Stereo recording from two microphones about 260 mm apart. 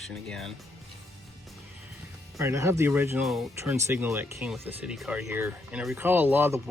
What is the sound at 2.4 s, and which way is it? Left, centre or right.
Speech, centre.